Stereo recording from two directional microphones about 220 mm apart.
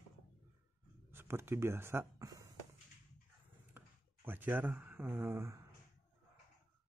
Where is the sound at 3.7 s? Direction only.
10° right (ahead or behind).